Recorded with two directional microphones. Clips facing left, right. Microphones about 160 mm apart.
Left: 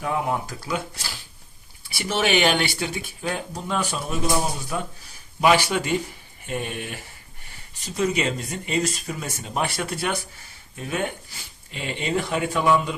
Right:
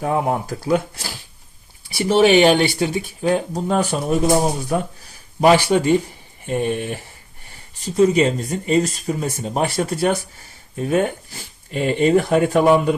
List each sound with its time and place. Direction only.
0.0 s speech: 40° right (ahead or behind)
1.9 s speech: 35° right (ahead or behind); by 13.0 s 55° right (ahead or behind)